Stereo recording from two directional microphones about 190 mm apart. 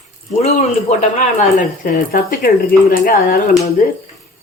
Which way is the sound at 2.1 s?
50° left (ahead or behind).